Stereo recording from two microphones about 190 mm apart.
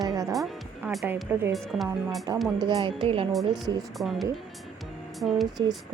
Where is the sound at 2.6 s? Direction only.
30° right (ahead or behind).